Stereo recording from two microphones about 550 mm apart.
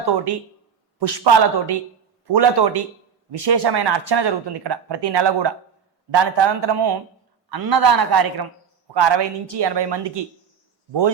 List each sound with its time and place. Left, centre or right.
0.9 s a man's voice: right